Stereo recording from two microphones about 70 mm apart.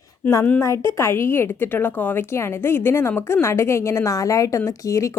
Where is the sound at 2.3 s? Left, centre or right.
Left.